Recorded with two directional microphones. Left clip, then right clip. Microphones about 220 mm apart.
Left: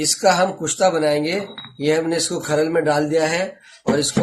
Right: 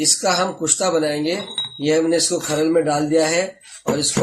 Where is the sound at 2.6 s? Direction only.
40° left (ahead or behind).